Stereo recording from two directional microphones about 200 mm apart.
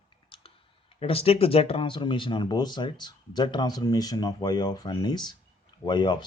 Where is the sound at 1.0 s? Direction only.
30° left (ahead or behind).